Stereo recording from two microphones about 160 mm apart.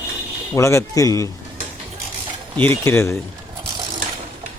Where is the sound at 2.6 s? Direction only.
15° left (ahead or behind).